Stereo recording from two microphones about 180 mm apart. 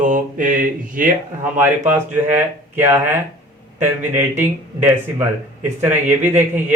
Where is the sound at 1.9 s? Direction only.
10° right (ahead or behind).